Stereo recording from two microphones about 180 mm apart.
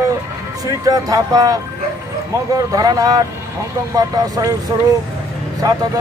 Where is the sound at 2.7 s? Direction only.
20° right (ahead or behind).